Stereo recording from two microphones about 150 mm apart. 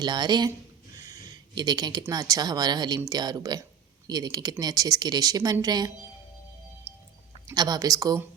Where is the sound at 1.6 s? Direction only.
25° right (ahead or behind).